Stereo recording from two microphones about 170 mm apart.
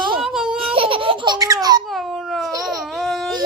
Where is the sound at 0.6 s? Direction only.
30° right (ahead or behind).